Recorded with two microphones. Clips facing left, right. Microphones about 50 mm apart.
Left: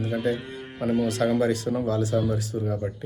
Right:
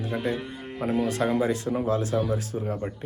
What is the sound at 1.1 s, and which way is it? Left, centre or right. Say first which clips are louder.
Speech: left 2 dB; right.